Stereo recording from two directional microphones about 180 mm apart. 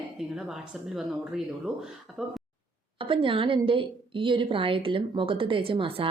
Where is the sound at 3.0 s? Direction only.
30° right (ahead or behind).